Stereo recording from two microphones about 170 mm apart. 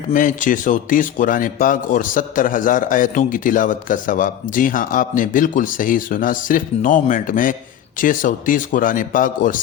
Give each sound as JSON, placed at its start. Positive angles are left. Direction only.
{"t": 0.1, "sound": "speech", "side_deg": 50}